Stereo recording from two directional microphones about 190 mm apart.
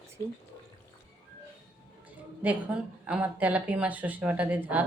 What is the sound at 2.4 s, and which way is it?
Speech, 5° right (ahead or behind).